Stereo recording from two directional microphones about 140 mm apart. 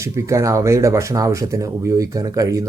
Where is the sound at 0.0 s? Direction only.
20° right (ahead or behind).